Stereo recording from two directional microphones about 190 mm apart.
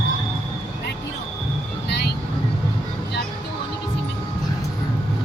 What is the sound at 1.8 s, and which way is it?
Vehicle, 65° left (ahead or behind).